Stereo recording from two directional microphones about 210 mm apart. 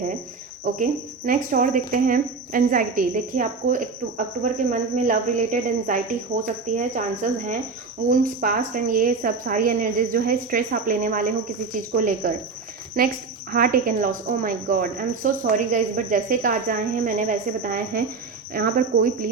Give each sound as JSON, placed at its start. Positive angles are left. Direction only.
{"t": 0.6, "sound": "speech", "side_deg": -40}
{"t": 13.0, "sound": "cricket", "side_deg": -45}
{"t": 13.5, "sound": "speech", "side_deg": -45}
{"t": 18.5, "sound": "cricket", "side_deg": -45}